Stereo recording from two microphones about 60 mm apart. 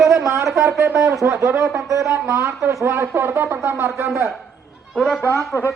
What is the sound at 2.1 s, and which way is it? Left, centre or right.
Speech, right.